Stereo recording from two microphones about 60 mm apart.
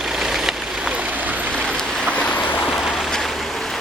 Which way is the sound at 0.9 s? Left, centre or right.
Right.